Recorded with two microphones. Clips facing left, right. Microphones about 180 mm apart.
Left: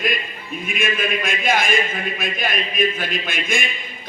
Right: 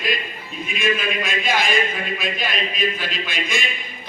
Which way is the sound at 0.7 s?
50° left (ahead or behind).